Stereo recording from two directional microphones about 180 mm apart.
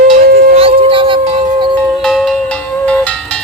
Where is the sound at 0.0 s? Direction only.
55° right (ahead or behind).